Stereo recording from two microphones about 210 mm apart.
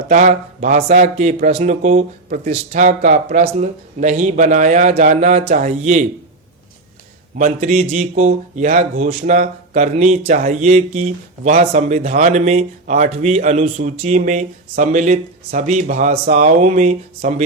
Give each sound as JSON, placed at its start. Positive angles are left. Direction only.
{"t": 0.1, "sound": "a man's voice", "side_deg": -35}
{"t": 7.3, "sound": "a man's voice", "side_deg": -35}